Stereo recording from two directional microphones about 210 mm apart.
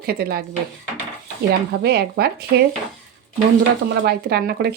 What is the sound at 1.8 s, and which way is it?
Speech, 50° right (ahead or behind).